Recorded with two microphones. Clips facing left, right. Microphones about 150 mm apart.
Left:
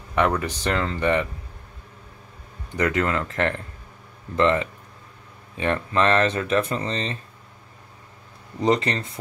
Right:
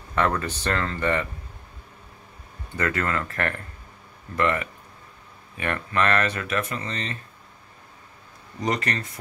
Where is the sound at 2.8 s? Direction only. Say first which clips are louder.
Left 3 dB; 20° left (ahead or behind).